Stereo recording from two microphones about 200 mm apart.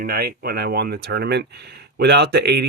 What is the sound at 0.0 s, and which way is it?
Speech, 50° right (ahead or behind).